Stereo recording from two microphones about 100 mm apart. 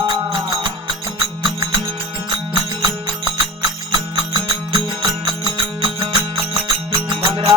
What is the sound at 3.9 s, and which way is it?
Music, 45° right (ahead or behind).